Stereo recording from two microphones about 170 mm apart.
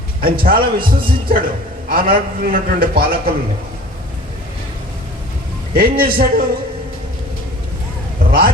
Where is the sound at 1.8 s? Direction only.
60° right (ahead or behind).